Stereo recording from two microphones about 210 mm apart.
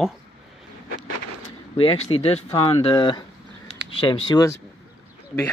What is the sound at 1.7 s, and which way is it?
Speech, 25° left (ahead or behind).